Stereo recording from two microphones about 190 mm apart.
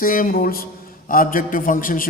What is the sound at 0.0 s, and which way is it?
A man's voice, 45° left (ahead or behind).